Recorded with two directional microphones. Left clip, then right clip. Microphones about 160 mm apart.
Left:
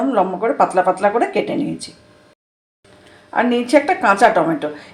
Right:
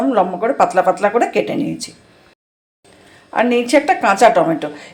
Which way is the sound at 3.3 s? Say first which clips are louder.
Right 1 dB; 10° right (ahead or behind).